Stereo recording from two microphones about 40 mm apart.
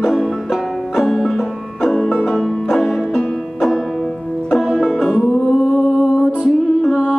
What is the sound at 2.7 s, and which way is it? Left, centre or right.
Music, centre.